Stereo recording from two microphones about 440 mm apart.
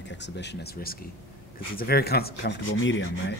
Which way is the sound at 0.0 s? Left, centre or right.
Left.